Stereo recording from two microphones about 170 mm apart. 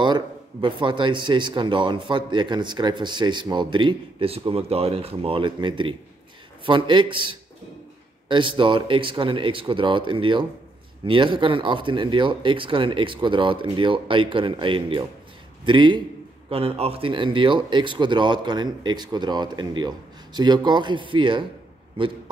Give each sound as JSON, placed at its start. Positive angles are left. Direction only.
{"t": 0.0, "sound": "speech", "side_deg": -25}